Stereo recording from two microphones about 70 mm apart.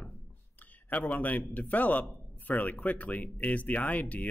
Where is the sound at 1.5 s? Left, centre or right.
Left.